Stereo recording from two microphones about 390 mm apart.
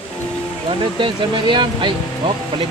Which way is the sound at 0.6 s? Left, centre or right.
Centre.